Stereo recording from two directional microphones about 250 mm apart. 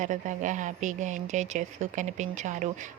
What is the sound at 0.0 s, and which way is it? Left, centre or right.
A woman's voice, right.